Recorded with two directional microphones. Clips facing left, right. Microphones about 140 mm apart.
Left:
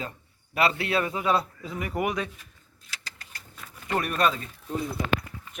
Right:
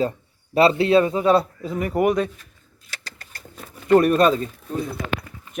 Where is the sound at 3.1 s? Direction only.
40° right (ahead or behind).